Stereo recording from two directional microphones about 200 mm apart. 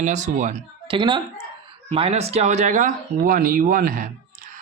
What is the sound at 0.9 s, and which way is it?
Speech, 25° right (ahead or behind).